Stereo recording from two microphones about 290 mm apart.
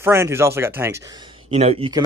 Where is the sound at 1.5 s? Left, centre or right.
Right.